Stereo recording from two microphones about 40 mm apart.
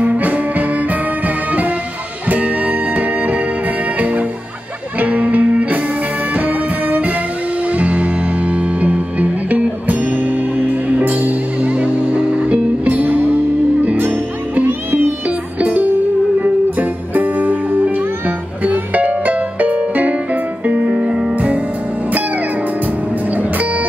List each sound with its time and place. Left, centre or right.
0.0 s music: right
2.2 s music: right
5.0 s music: right
12.8 s music: right
15.6 s music: right
20.9 s music: right